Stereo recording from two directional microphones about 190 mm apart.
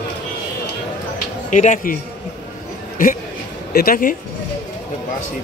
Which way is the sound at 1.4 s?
40° left (ahead or behind).